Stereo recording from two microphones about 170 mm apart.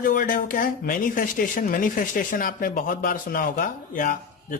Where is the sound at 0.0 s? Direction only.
55° left (ahead or behind).